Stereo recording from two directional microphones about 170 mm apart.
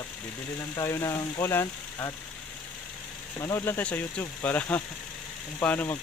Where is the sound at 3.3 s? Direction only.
20° left (ahead or behind).